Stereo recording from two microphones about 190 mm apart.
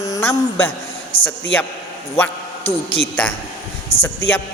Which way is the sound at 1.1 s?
30° left (ahead or behind).